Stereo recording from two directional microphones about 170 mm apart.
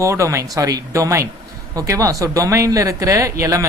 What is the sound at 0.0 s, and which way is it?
Speech, 15° right (ahead or behind).